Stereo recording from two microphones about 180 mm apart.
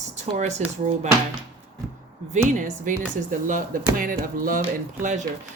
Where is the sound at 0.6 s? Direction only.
40° right (ahead or behind).